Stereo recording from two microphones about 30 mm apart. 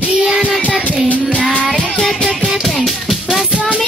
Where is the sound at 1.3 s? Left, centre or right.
Left.